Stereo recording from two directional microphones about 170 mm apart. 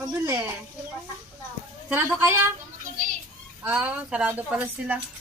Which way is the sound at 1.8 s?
10° right (ahead or behind).